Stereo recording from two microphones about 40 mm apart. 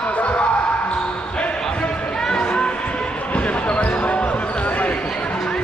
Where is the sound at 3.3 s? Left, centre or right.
Left.